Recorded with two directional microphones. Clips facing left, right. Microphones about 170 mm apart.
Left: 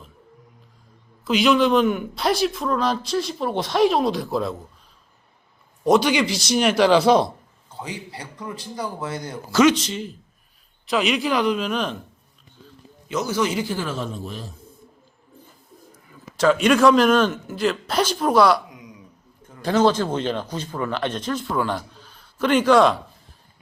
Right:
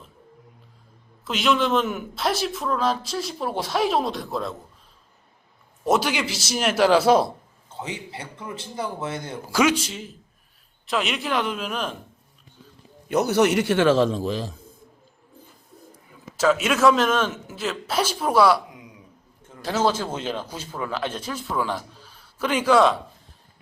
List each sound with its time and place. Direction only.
1.2 s speech: centre (ahead or behind)
5.8 s speech: 5° right (ahead or behind)
7.7 s speech: 25° right (ahead or behind)
9.5 s speech: 10° right (ahead or behind)
13.1 s a man's voice: 60° right (ahead or behind); by 14.5 s 90° right
16.4 s speech: 5° right (ahead or behind)
19.6 s speech: 5° right (ahead or behind)